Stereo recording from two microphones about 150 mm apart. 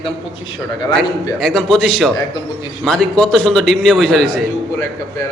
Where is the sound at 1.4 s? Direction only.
Centre (ahead or behind).